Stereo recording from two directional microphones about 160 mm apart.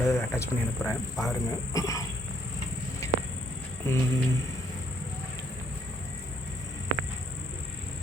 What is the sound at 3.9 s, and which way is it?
Speech, 15° left (ahead or behind).